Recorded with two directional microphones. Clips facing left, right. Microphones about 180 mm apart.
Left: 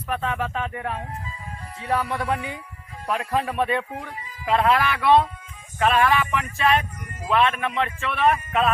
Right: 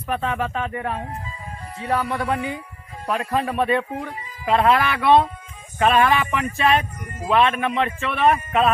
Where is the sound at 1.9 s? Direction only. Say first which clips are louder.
Right 1 dB; 15° left (ahead or behind).